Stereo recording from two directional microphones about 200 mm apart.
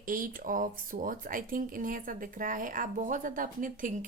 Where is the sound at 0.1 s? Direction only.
45° right (ahead or behind).